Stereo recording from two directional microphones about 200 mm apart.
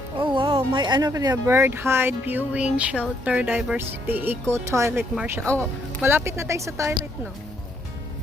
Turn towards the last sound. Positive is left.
turn(degrees=-15)  # may be behind; listen again after turning